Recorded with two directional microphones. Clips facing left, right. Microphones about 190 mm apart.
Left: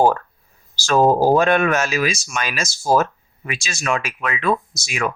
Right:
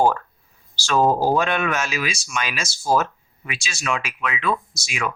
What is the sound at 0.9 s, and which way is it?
Speech, 45° left (ahead or behind).